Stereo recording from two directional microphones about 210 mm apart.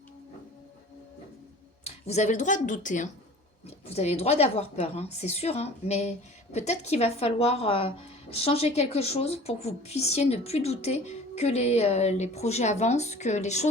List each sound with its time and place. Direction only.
1.8 s a woman's voice: 30° left (ahead or behind)